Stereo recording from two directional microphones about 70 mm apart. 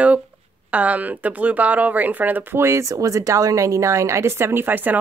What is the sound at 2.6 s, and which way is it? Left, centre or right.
A woman's voice, right.